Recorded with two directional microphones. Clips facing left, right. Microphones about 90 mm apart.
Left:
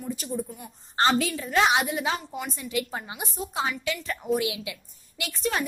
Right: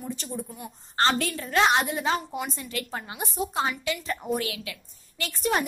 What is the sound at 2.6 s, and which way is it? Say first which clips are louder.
Speech: left 3 dB; 15° left (ahead or behind).